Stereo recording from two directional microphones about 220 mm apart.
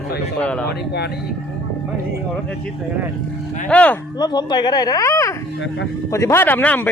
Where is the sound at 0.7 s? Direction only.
45° left (ahead or behind).